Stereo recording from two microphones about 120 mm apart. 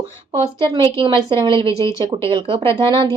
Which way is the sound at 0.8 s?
45° right (ahead or behind).